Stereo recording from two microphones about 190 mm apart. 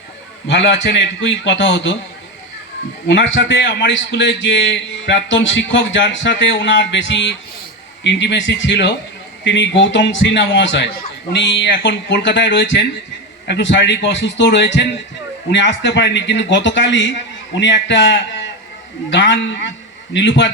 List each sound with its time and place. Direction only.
0.4 s a man's voice: 70° left (ahead or behind)
3.1 s a man's voice: 70° left (ahead or behind)